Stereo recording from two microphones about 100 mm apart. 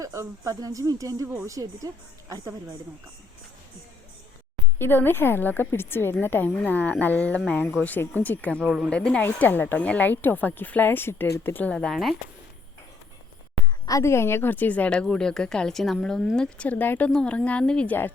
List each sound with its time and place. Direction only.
0.0 s speech: 30° right (ahead or behind)
4.8 s a woman's voice: 20° left (ahead or behind)
8.6 s speech: 5° right (ahead or behind)
8.9 s speech: 10° left (ahead or behind)
11.7 s speech: 10° left (ahead or behind)
13.8 s speech: 30° left (ahead or behind); by 17.9 s 10° left (ahead or behind)